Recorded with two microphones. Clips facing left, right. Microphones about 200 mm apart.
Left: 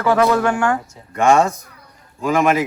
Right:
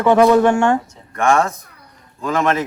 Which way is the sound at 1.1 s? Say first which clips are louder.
Left 2 dB; 15° left (ahead or behind).